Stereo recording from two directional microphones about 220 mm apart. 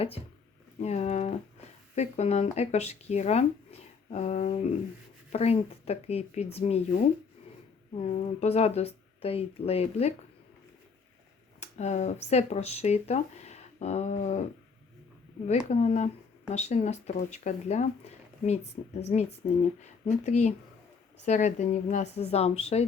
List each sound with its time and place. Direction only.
0.8 s speech: 30° left (ahead or behind)
11.6 s speech: 30° left (ahead or behind)
15.7 s speech: 30° left (ahead or behind)